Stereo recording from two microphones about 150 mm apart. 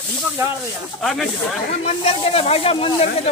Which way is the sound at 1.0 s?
Centre (ahead or behind).